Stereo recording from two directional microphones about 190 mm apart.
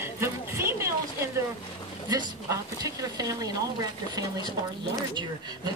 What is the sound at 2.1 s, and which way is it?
Speech, 20° right (ahead or behind).